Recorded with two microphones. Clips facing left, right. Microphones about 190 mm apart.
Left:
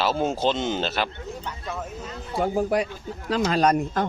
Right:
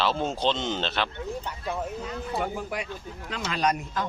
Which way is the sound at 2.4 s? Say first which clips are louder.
Left 10 dB; 40° left (ahead or behind).